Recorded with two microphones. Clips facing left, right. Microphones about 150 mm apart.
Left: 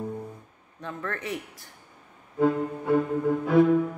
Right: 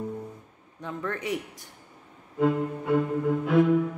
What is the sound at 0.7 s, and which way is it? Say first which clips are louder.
Speech: right 1 dB; 15° right (ahead or behind).